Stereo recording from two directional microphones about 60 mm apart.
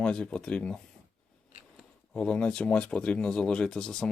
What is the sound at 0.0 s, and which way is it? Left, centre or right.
Speech, centre.